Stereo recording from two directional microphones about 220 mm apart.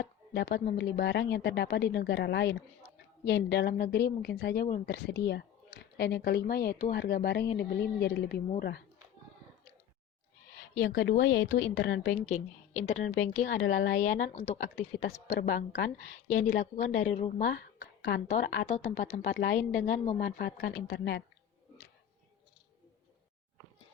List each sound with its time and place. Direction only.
0.0 s speech: 50° left (ahead or behind)
10.8 s speech: 50° left (ahead or behind)
12.2 s a woman's voice: 30° left (ahead or behind)
15.4 s speech: 45° left (ahead or behind)
16.2 s a woman's voice: 30° left (ahead or behind); by 21.2 s 50° left (ahead or behind)